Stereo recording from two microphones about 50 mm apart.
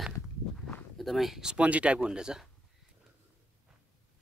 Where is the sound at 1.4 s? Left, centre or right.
Right.